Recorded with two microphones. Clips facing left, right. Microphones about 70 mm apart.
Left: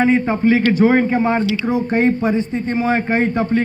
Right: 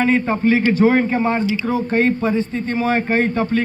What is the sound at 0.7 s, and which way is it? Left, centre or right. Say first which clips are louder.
Speech: left 1 dB; centre.